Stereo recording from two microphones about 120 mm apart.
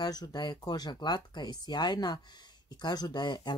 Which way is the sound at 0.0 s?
35° left (ahead or behind).